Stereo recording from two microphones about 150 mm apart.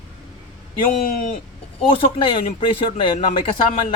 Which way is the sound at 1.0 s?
65° left (ahead or behind).